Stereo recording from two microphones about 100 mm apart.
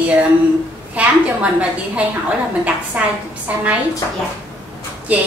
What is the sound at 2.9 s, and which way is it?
Speech, 15° right (ahead or behind).